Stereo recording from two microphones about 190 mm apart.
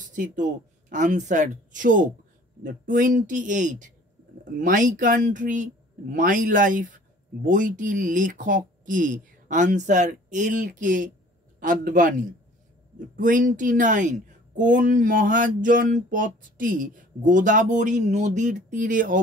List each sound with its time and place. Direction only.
0.0 s speech: 45° right (ahead or behind)